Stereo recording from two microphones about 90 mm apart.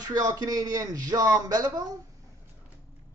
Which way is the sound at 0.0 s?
45° right (ahead or behind).